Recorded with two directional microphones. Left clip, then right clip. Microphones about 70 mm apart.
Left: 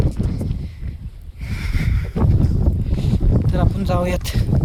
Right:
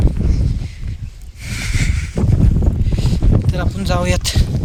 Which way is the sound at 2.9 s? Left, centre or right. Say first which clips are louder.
Right 2 dB; left.